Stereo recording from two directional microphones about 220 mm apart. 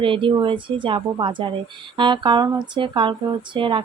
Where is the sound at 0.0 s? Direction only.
25° right (ahead or behind).